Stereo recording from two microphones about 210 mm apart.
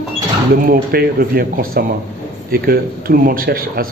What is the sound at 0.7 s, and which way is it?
Speech, 45° right (ahead or behind).